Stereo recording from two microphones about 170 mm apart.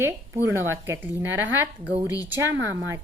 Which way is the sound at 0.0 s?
15° right (ahead or behind).